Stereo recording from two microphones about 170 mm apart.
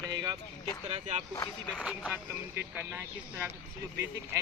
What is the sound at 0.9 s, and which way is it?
Speech, 40° right (ahead or behind).